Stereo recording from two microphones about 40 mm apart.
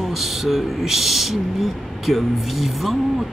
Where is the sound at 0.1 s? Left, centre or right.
Centre.